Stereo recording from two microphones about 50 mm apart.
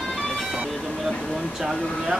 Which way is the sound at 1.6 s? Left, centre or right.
Centre.